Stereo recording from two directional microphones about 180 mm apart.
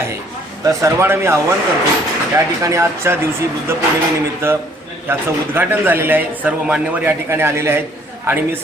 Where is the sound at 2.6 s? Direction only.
15° right (ahead or behind).